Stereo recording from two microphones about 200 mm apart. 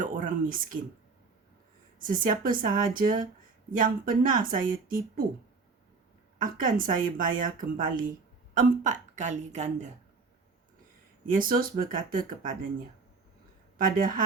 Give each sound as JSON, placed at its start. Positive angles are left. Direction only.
{"t": 0.0, "sound": "speech", "side_deg": -40}
{"t": 2.0, "sound": "a woman's voice", "side_deg": -45}
{"t": 6.4, "sound": "a woman's voice", "side_deg": -45}
{"t": 11.3, "sound": "a woman's voice", "side_deg": -45}
{"t": 13.7, "sound": "a woman's voice", "side_deg": -45}